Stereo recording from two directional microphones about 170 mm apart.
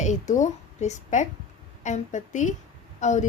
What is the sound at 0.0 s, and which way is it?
A woman's voice, 45° left (ahead or behind).